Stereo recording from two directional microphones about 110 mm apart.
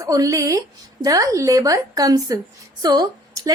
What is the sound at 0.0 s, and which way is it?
A woman's voice, 30° right (ahead or behind).